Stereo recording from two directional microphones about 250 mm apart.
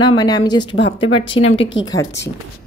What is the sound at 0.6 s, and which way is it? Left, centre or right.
Speech, left.